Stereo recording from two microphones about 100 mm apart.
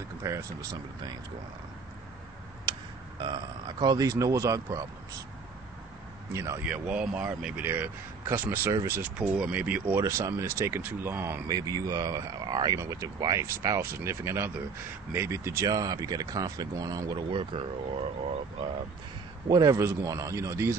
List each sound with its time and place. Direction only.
0.2 s speech: 30° right (ahead or behind)
2.7 s a sound: 45° right (ahead or behind)
3.2 s speech: 50° right (ahead or behind); by 4.6 s 35° right (ahead or behind)
6.3 s speech: 30° right (ahead or behind)
6.6 s speech: 10° right (ahead or behind)
9.0 s speech: 10° right (ahead or behind)
11.4 s speech: 40° right (ahead or behind)
15.6 s speech: 40° right (ahead or behind)
17.3 s speech: 55° right (ahead or behind)
19.5 s speech: 40° right (ahead or behind)
19.8 s speech: 30° right (ahead or behind)